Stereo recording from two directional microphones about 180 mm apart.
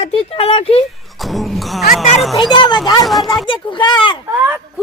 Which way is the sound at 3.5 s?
25° left (ahead or behind).